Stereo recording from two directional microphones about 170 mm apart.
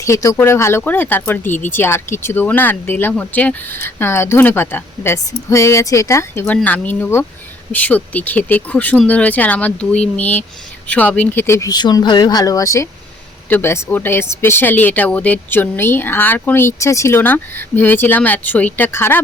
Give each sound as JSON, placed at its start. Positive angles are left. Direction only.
{"t": 0.0, "sound": "speech", "side_deg": 20}